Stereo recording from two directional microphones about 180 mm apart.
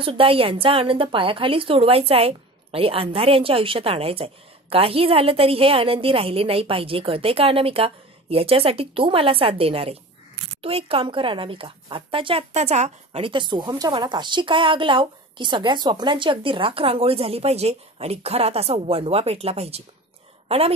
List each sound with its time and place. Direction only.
0.0 s a woman's voice: 30° right (ahead or behind)